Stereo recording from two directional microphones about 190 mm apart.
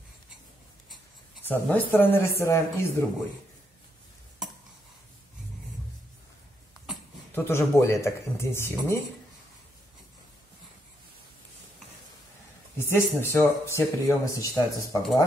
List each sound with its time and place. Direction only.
1.4 s speech: 10° left (ahead or behind)
7.3 s speech: 10° left (ahead or behind)
12.7 s speech: 10° left (ahead or behind)